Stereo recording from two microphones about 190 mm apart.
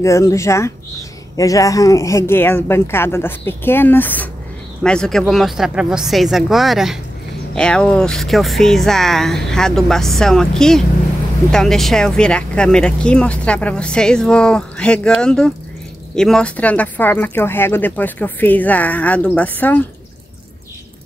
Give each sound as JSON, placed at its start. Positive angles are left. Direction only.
{"t": 0.0, "sound": "speech", "side_deg": 15}